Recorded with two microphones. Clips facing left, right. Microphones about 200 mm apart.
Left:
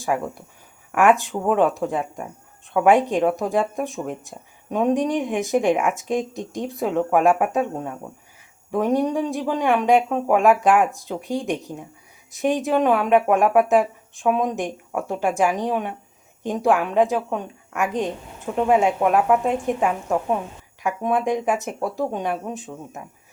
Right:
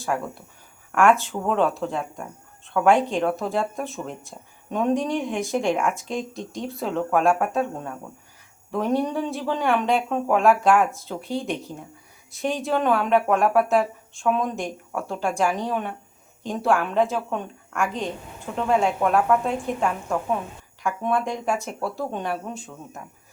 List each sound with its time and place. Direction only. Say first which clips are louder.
0.1 s speech: left 3 dB; 10° left (ahead or behind)
0.9 s speech: left 1 dB; 20° left (ahead or behind)
1.2 s speech: left 4 dB; 5° left (ahead or behind)
1.5 s speech: left 2 dB; 15° left (ahead or behind)
5.7 s speech: left 2 dB; 5° left (ahead or behind)
6.3 s speech: left 3 dB; 20° left (ahead or behind)
8.8 s speech: left 3 dB; 15° left (ahead or behind)